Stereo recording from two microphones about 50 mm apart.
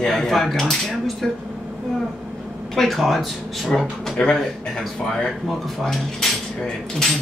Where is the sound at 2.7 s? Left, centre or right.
Centre.